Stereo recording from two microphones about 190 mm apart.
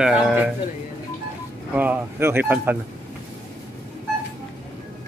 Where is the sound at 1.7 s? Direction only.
10° right (ahead or behind).